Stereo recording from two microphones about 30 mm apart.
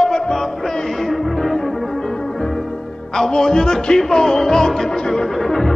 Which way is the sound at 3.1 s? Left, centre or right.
Centre.